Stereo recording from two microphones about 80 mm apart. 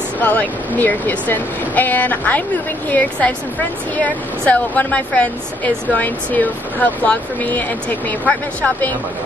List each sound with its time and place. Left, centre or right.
0.2 s a woman's voice: left